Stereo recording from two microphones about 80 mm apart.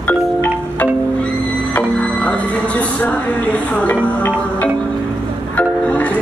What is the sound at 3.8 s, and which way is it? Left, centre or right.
Music, left.